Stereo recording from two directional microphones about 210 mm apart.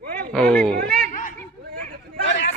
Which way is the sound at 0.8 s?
45° right (ahead or behind).